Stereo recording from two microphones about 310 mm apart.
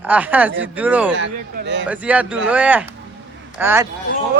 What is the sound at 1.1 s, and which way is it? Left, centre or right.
Speech, right.